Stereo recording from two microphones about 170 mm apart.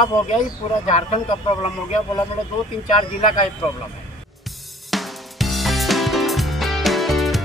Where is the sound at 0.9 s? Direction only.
40° left (ahead or behind).